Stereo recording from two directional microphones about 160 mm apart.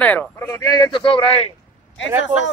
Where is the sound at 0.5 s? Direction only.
25° left (ahead or behind).